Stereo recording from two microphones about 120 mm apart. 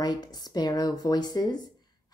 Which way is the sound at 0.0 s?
35° left (ahead or behind).